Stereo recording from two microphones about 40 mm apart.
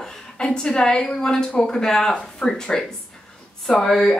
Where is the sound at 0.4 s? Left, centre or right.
Centre.